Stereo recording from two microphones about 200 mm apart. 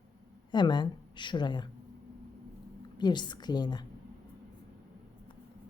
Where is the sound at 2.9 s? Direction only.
20° left (ahead or behind).